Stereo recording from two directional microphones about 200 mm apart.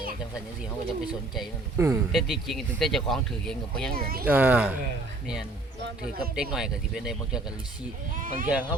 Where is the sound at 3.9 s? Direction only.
50° right (ahead or behind).